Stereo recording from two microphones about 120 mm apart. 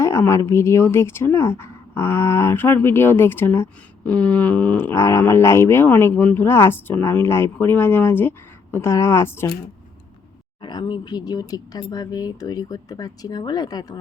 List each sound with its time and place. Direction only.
0.0 s a woman's voice: 25° left (ahead or behind)
10.6 s speech: 40° left (ahead or behind)